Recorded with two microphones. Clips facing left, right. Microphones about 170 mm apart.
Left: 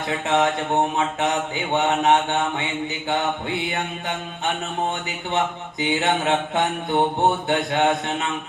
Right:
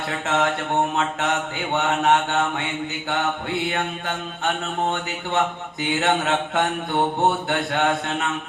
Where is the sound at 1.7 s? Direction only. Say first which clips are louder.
Left 1 dB; 20° left (ahead or behind).